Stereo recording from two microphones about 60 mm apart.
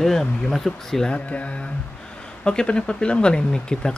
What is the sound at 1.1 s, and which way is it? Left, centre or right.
Speech, left.